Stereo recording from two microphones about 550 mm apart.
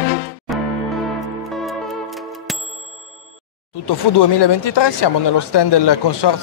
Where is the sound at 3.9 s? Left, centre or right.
Left.